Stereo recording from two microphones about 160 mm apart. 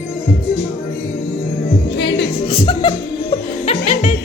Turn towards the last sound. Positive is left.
turn(degrees=40)  # may be behind; listen again after turning